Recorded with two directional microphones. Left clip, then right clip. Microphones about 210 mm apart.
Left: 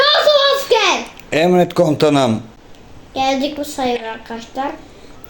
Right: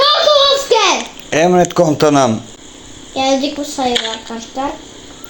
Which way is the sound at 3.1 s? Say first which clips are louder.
Right 2 dB; 45° right (ahead or behind).